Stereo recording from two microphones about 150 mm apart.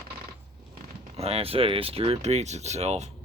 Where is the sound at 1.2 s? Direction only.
40° right (ahead or behind).